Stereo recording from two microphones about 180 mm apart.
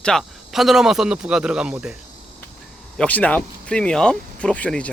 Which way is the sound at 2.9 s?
10° left (ahead or behind).